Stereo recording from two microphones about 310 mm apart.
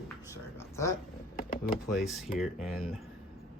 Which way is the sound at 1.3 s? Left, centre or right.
Left.